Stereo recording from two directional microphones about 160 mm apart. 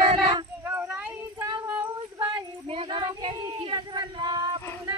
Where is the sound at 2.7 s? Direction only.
30° right (ahead or behind).